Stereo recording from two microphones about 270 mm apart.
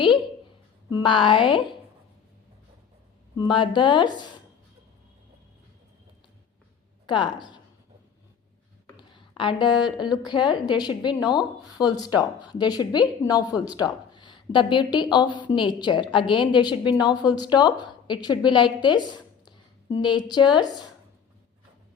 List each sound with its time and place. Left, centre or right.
0.9 s speech: centre
3.3 s speech: centre
7.1 s speech: centre
8.9 s a sound: centre
10.2 s speech: centre